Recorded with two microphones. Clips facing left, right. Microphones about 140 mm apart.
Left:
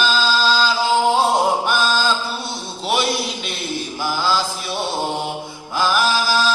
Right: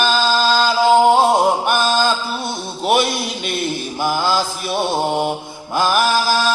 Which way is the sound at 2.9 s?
50° right (ahead or behind).